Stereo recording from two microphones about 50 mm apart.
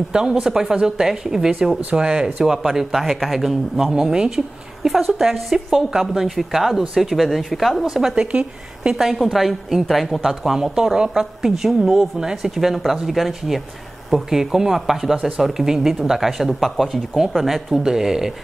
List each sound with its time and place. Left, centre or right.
0.1 s a woman's voice: centre
4.8 s a woman's voice: centre
8.3 s a woman's voice: right
8.9 s a woman's voice: centre